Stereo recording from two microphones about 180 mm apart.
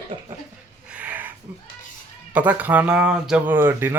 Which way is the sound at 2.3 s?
10° right (ahead or behind).